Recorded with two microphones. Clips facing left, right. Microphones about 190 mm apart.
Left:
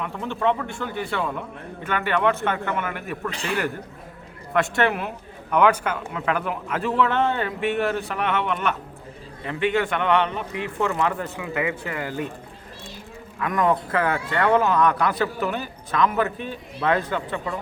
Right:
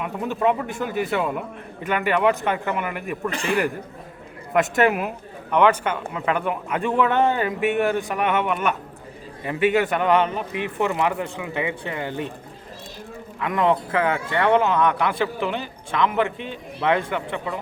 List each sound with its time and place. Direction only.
0.0 s a man's voice: 10° right (ahead or behind)
3.2 s a man's voice: 50° right (ahead or behind)
4.8 s speech: 5° right (ahead or behind)
5.5 s speech: 5° left (ahead or behind)
8.0 s a man's voice: 15° right (ahead or behind)
8.4 s a man's voice: 5° right (ahead or behind); by 12.3 s 25° right (ahead or behind)
13.4 s speech: 25° right (ahead or behind)